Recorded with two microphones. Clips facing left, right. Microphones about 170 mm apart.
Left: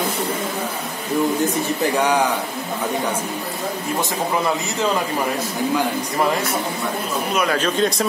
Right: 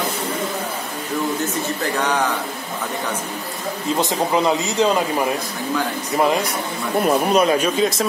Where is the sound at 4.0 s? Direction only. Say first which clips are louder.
Right 4 dB; 20° right (ahead or behind).